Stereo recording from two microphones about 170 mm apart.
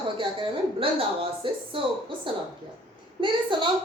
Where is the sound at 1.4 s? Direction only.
30° right (ahead or behind).